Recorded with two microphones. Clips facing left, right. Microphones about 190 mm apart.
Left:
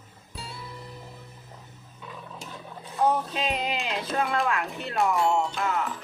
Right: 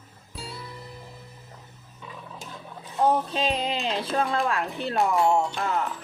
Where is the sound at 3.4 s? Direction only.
30° right (ahead or behind).